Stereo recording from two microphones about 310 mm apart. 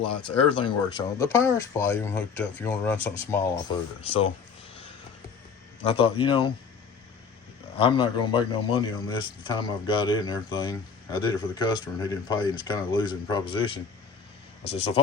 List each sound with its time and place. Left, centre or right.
0.3 s a man's voice: centre
4.0 s speech: centre
6.0 s a man's voice: centre
7.8 s a man's voice: centre